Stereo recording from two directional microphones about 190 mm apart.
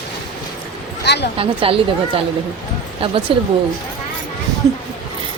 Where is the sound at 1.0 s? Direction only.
60° left (ahead or behind).